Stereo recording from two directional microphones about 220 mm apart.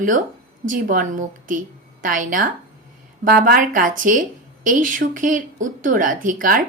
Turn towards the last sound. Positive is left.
turn(degrees=-40)  # may be behind; listen again after turning